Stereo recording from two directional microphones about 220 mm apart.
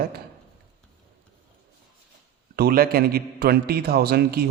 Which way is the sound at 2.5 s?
45° right (ahead or behind).